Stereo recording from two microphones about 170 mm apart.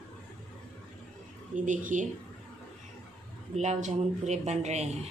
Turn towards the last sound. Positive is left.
turn(degrees=-40)  # may be behind; listen again after turning